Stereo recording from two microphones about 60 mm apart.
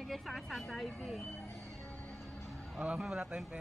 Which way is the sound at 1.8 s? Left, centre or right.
Left.